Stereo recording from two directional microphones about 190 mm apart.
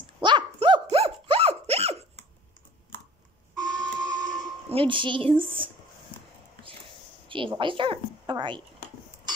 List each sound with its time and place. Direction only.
0.0 s dog: 25° right (ahead or behind)
3.6 s printer: 5° left (ahead or behind)
4.4 s speech: 25° right (ahead or behind)
7.2 s a woman's voice: 25° right (ahead or behind)